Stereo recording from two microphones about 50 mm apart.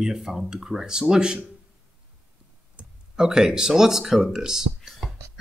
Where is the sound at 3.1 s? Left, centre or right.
Centre.